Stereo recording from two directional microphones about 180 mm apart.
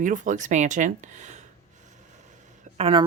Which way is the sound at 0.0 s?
45° right (ahead or behind).